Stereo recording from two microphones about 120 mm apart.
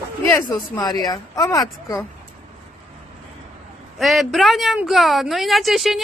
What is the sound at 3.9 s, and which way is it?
A woman's voice, centre (ahead or behind).